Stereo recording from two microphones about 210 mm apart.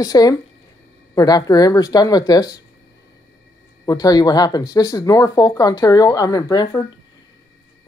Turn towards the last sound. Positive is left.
turn(degrees=20)  # may be behind; listen again after turning